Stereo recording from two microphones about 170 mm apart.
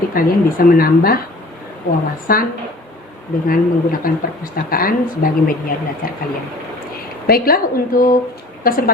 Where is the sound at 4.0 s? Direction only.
60° left (ahead or behind).